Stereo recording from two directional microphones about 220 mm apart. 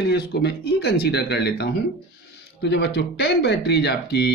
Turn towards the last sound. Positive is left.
turn(degrees=50)  # may be behind; listen again after turning